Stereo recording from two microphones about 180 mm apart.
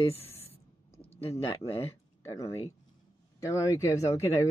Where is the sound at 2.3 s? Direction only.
20° left (ahead or behind).